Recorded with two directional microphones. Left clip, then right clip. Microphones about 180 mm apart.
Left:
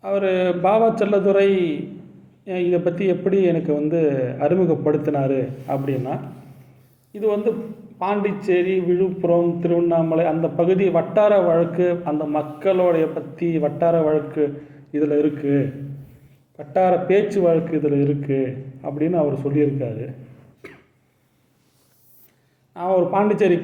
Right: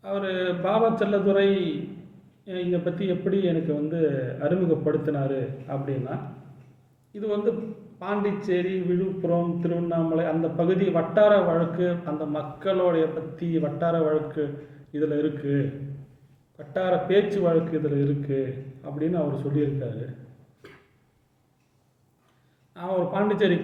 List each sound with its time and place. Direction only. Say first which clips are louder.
0.0 s a man's voice: left 8 dB; 15° left (ahead or behind)
22.7 s a man's voice: left 8 dB; 15° left (ahead or behind)